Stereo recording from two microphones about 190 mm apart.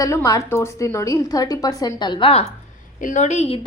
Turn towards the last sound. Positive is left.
turn(degrees=35)  # may be behind; listen again after turning